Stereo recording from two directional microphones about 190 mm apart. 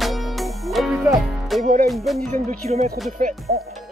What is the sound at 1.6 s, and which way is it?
Music, 40° right (ahead or behind).